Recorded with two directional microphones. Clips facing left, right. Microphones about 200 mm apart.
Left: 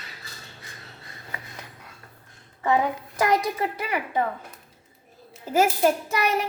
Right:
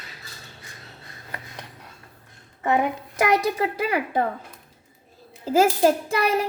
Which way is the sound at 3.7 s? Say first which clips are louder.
Right 3 dB; 35° right (ahead or behind).